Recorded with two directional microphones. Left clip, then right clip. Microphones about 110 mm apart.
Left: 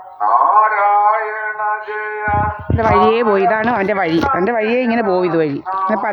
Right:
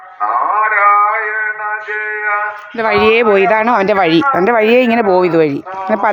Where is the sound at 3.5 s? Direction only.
35° right (ahead or behind).